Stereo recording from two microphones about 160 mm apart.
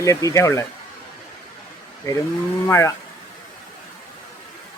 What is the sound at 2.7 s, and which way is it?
Speech, 20° left (ahead or behind).